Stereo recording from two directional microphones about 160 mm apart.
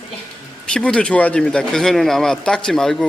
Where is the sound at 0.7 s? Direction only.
5° left (ahead or behind).